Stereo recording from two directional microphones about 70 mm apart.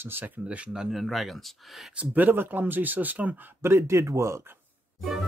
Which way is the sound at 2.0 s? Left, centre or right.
Right.